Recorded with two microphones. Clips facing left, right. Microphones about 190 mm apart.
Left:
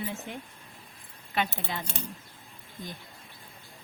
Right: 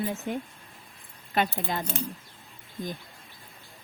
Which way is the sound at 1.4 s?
45° right (ahead or behind).